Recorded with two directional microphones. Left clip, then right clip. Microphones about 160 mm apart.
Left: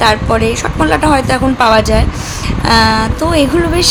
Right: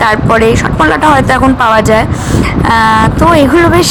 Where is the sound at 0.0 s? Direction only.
25° right (ahead or behind).